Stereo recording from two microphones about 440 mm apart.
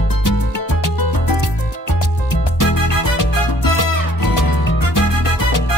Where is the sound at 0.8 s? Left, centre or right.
Left.